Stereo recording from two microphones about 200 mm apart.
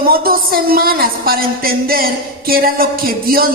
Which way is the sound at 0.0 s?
50° right (ahead or behind).